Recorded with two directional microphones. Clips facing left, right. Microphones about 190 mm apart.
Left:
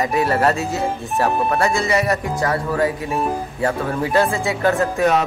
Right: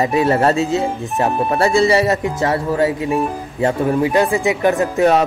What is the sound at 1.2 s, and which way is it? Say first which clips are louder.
Speech: right 2 dB; 30° right (ahead or behind).